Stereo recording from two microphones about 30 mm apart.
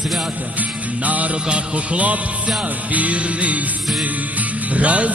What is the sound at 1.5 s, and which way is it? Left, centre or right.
Music, right.